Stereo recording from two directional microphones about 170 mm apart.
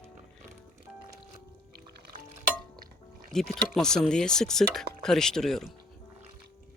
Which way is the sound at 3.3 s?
5° left (ahead or behind).